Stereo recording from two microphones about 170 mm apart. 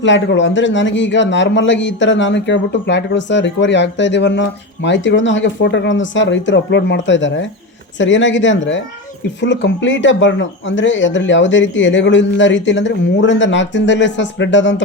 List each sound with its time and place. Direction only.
0.0 s a man's voice: 90° left